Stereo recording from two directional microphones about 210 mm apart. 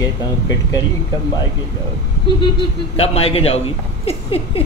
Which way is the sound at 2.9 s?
30° left (ahead or behind).